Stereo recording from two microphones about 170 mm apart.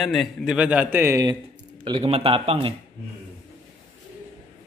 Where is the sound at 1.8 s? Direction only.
30° right (ahead or behind).